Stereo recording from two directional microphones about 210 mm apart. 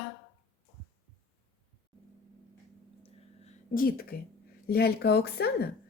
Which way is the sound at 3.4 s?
40° left (ahead or behind).